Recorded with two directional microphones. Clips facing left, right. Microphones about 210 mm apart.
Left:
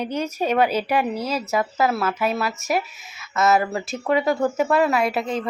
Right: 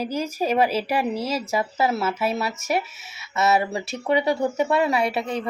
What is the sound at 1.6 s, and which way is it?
Speech, 30° right (ahead or behind).